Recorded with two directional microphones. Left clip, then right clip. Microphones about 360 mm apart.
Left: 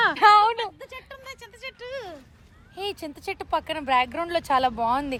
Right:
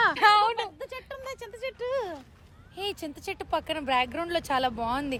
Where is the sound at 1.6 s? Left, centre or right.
Right.